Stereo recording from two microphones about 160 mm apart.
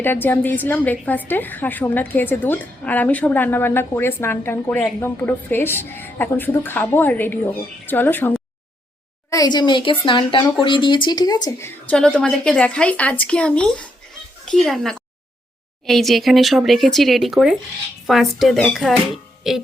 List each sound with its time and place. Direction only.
0.0 s a woman's voice: 15° left (ahead or behind)
9.3 s speech: 25° left (ahead or behind)
11.9 s a woman's voice: 5° left (ahead or behind)